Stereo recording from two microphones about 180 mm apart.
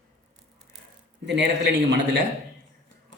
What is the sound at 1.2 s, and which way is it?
A man's voice, 75° right (ahead or behind).